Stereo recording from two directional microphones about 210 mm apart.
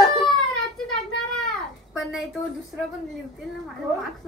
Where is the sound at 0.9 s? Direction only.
Centre (ahead or behind).